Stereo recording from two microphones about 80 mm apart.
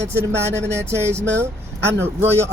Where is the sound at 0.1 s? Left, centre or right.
Right.